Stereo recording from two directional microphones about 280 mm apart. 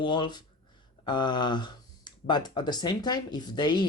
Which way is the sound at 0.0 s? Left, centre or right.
Centre.